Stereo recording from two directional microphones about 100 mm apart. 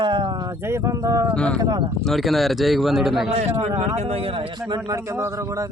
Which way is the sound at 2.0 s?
Centre (ahead or behind).